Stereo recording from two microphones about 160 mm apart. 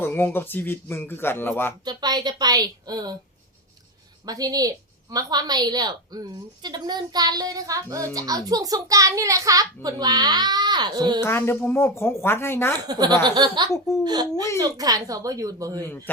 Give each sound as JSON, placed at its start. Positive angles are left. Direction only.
{"t": 0.0, "sound": "speech", "side_deg": 15}
{"t": 1.8, "sound": "a woman's voice", "side_deg": -25}
{"t": 4.3, "sound": "a woman's voice", "side_deg": -25}
{"t": 11.2, "sound": "speech", "side_deg": 15}
{"t": 12.9, "sound": "a woman's voice", "side_deg": -25}
{"t": 13.7, "sound": "speech", "side_deg": 20}
{"t": 14.0, "sound": "a woman's voice", "side_deg": -25}
{"t": 15.9, "sound": "speech", "side_deg": 15}